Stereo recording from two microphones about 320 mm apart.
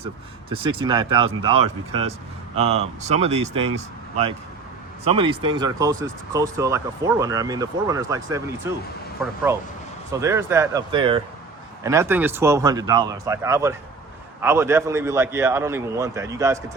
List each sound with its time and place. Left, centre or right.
0.5 s speech: centre
1.5 s speech: right
2.6 s speech: centre
5.0 s speech: centre